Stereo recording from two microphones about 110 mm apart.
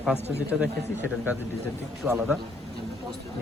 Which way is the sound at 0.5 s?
5° right (ahead or behind).